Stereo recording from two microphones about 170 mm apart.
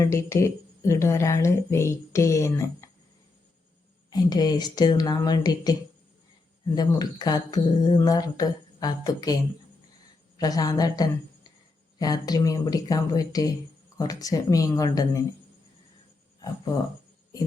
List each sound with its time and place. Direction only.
0.1 s speech: 15° left (ahead or behind)
4.1 s mantra: 25° left (ahead or behind)
6.7 s mantra: 25° left (ahead or behind)
10.3 s mantra: 20° left (ahead or behind)